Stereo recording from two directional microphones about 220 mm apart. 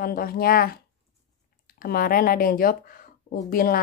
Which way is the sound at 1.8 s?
40° left (ahead or behind).